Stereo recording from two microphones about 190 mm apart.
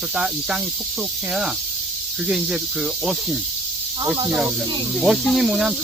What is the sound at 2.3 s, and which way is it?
Speech, centre (ahead or behind).